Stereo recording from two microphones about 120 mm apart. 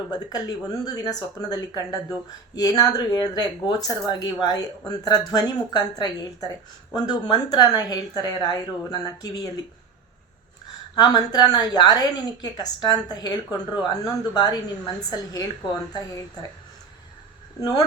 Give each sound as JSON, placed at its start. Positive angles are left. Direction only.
{"t": 0.1, "sound": "a woman's voice", "side_deg": 35}
{"t": 10.9, "sound": "a woman's voice", "side_deg": 35}